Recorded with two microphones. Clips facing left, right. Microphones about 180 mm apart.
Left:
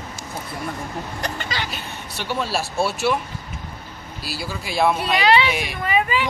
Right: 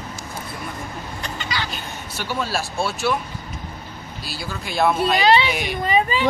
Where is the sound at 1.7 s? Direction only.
Centre (ahead or behind).